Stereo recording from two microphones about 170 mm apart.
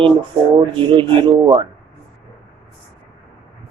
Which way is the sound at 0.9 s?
30° right (ahead or behind).